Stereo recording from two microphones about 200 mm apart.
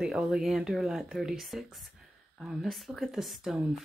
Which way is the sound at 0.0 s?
5° right (ahead or behind).